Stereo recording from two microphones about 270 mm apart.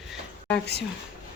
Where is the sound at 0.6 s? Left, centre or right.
Left.